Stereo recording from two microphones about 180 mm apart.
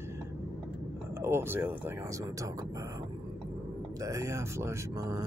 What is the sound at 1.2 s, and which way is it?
Speech, 15° right (ahead or behind).